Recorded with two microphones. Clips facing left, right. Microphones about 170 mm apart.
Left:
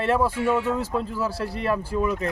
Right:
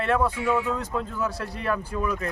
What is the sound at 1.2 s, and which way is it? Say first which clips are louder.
Speech: left 3 dB; 30° left (ahead or behind).